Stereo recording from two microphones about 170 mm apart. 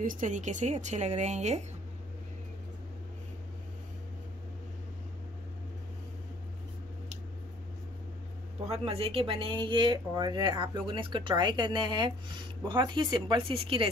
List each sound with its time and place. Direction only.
0.0 s speech: 50° right (ahead or behind)
8.6 s speech: 35° right (ahead or behind)